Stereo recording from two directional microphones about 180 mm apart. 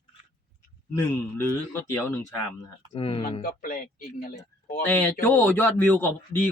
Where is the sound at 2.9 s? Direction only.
30° left (ahead or behind).